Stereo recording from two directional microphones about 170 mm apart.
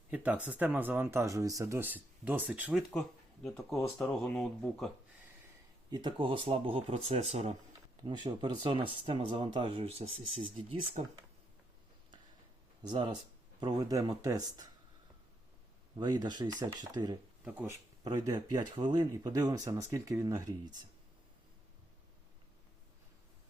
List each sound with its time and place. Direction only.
0.1 s speech: 10° right (ahead or behind)
2.9 s speech: centre (ahead or behind)
5.9 s speech: 25° right (ahead or behind)
8.0 s speech: 25° right (ahead or behind); by 11.1 s 45° right (ahead or behind)
12.8 s speech: 25° right (ahead or behind)
16.0 s speech: 25° right (ahead or behind)